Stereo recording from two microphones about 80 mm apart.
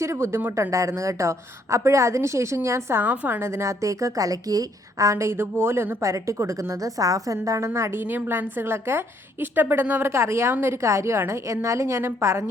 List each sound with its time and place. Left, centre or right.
0.0 s a woman's voice: right
3.0 s a woman's voice: right
3.4 s a woman's voice: right
10.1 s a woman's voice: right